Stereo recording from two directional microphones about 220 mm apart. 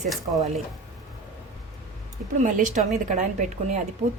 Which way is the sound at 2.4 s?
35° right (ahead or behind).